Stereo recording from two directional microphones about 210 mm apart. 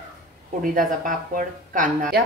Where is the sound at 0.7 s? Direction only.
40° right (ahead or behind).